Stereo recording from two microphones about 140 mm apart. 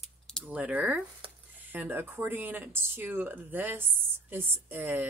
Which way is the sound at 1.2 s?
40° right (ahead or behind).